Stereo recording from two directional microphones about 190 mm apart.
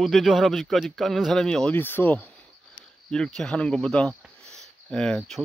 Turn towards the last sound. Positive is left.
turn(degrees=5)  # may be behind; listen again after turning